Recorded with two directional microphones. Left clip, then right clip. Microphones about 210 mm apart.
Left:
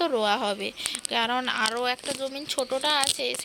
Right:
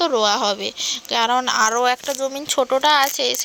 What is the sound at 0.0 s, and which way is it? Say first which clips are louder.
Speech: right 7 dB; 5° right (ahead or behind).